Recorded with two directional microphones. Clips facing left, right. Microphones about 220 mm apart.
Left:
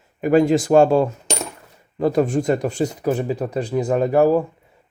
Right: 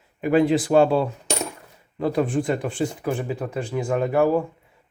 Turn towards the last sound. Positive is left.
turn(degrees=40)  # may be behind; listen again after turning